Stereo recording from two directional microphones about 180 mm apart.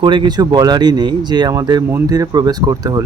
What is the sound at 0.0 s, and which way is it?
Speech, 25° right (ahead or behind).